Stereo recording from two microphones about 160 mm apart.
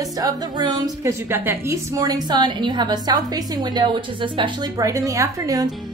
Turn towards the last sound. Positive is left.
turn(degrees=-20)  # may be behind; listen again after turning